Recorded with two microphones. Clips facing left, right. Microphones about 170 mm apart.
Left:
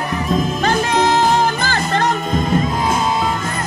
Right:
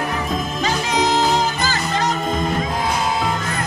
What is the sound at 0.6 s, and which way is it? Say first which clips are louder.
Music: left 3 dB; 60° left (ahead or behind).